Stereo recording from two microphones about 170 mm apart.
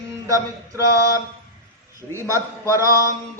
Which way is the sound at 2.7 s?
20° right (ahead or behind).